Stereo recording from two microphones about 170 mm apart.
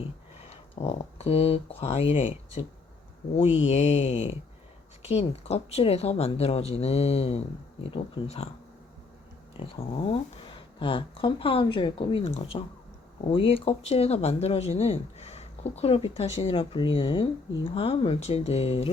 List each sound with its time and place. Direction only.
0.5 s speech: 40° left (ahead or behind)
3.7 s speech: 40° left (ahead or behind)
9.6 s speech: 35° left (ahead or behind)